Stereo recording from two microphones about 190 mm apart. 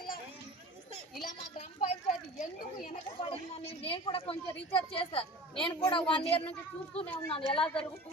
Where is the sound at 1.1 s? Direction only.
40° left (ahead or behind).